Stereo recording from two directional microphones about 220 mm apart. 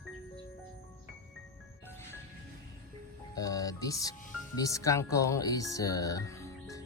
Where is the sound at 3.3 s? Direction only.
15° left (ahead or behind).